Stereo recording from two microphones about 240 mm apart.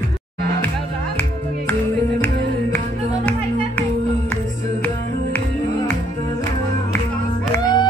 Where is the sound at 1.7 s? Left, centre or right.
Centre.